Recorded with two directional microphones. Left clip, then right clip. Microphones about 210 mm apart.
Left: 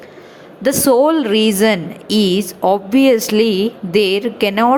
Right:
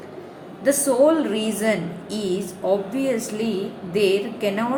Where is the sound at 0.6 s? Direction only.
45° left (ahead or behind).